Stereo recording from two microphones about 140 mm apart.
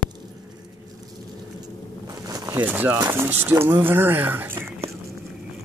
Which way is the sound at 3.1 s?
15° right (ahead or behind).